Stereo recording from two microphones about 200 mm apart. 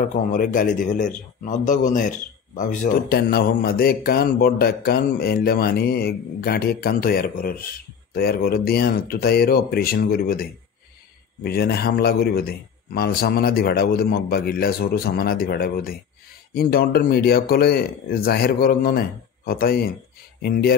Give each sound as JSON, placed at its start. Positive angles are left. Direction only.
{"t": 0.0, "sound": "a man's voice", "side_deg": 40}